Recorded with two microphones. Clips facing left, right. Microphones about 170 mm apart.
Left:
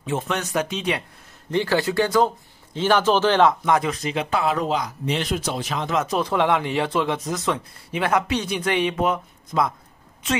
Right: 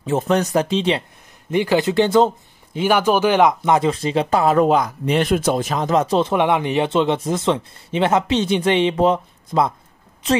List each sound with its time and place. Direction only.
0.0 s speech: 40° right (ahead or behind)
1.5 s speech: 15° right (ahead or behind)
2.7 s speech: 10° right (ahead or behind); by 9.8 s 30° right (ahead or behind)